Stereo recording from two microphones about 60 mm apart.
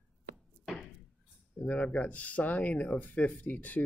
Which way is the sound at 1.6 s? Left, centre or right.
Left.